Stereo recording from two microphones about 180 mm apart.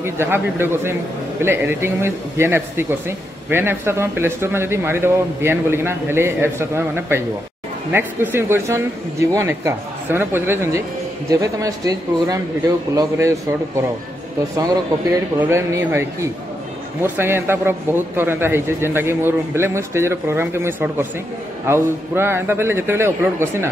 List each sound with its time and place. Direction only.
0.0 s a man's voice: 15° right (ahead or behind)
15.4 s speech: 15° right (ahead or behind)